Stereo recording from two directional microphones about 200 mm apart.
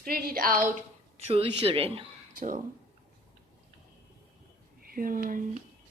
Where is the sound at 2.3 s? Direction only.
45° right (ahead or behind).